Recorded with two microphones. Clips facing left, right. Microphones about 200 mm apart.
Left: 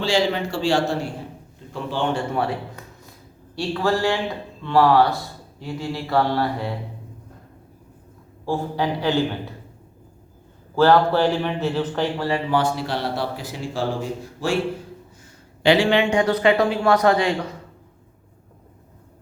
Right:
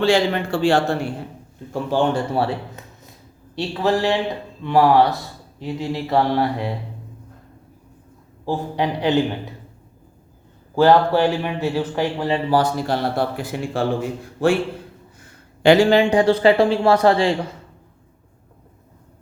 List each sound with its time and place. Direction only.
0.0 s a man's voice: 55° right (ahead or behind)
1.7 s speech: 45° right (ahead or behind); by 3.1 s 25° right (ahead or behind)
3.5 s mantra: 20° right (ahead or behind)
8.4 s mantra: 20° right (ahead or behind)
10.8 s speech: 15° right (ahead or behind)
12.5 s a man's voice: 40° right (ahead or behind)